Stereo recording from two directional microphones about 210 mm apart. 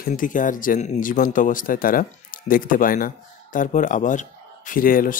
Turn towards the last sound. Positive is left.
turn(degrees=40)  # may be behind; listen again after turning